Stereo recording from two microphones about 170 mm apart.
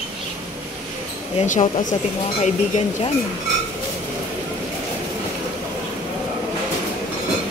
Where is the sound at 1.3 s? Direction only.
40° left (ahead or behind).